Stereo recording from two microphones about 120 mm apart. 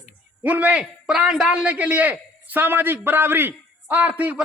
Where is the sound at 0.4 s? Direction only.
15° right (ahead or behind).